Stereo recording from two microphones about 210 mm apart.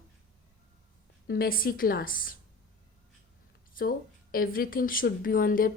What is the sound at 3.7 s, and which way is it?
Speech, 45° left (ahead or behind).